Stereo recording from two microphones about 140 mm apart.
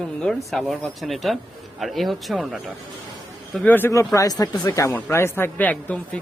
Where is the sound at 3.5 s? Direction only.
10° left (ahead or behind).